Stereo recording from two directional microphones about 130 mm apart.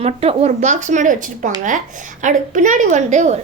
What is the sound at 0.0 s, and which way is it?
Speech, 50° right (ahead or behind).